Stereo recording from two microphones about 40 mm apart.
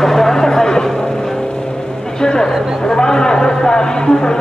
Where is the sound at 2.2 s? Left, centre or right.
Centre.